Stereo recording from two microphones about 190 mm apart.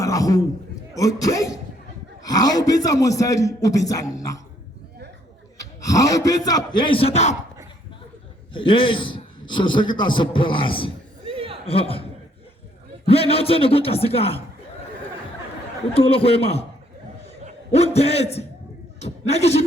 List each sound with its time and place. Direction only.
0.0 s a sound: 15° left (ahead or behind)
0.9 s a man's voice: 20° left (ahead or behind)
5.5 s a man's voice: 20° left (ahead or behind); by 7.3 s 35° left (ahead or behind)
8.5 s a man's voice: 25° left (ahead or behind)
11.3 s a sound: 30° right (ahead or behind)
11.6 s a man's voice: 30° left (ahead or behind)
13.1 s a man's voice: 30° left (ahead or behind)
16.0 s a man's voice: 30° left (ahead or behind)
17.7 s a man's voice: 35° left (ahead or behind)